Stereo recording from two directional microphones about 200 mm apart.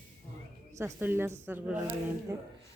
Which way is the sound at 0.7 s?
15° right (ahead or behind).